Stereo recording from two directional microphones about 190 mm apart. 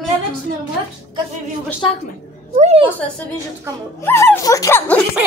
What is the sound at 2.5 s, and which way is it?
Speech, 35° right (ahead or behind).